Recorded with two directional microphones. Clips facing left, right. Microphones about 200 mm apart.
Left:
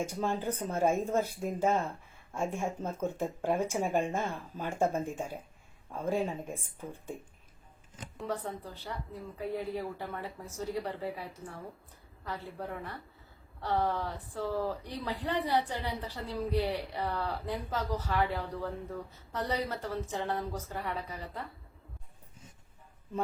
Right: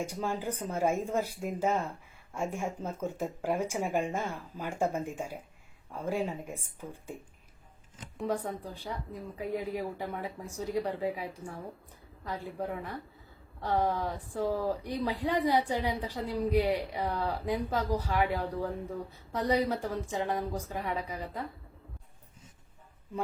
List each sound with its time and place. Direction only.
0.3 s speech: 10° right (ahead or behind)
8.3 s speech: 10° right (ahead or behind)